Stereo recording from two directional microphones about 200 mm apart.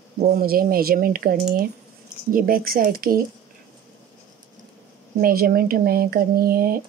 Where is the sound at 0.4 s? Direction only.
45° right (ahead or behind).